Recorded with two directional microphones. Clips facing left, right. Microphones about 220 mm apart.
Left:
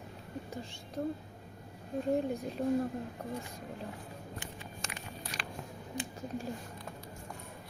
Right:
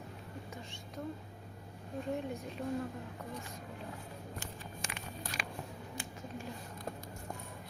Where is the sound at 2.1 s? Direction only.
35° left (ahead or behind).